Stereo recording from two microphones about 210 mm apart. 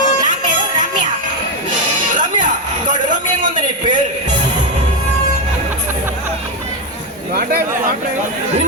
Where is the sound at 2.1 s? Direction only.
35° right (ahead or behind).